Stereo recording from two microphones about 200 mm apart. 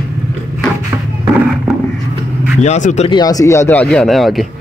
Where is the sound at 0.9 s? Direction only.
10° right (ahead or behind).